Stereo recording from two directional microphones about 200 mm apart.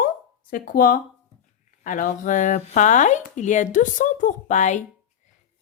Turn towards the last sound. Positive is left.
turn(degrees=35)  # may be behind; listen again after turning